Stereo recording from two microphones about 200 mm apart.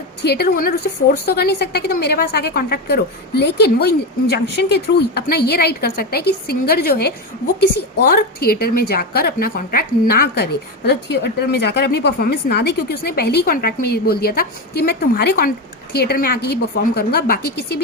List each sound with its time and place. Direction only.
0.2 s a woman's voice: 55° left (ahead or behind)